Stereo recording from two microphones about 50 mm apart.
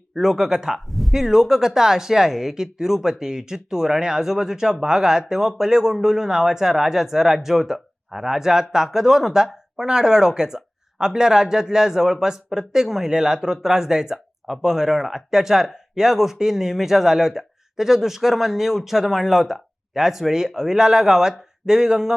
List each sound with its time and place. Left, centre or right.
0.1 s speech: centre